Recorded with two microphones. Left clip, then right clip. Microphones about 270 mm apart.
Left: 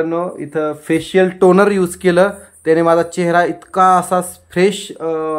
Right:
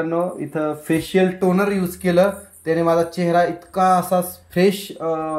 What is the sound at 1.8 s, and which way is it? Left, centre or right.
Speech, left.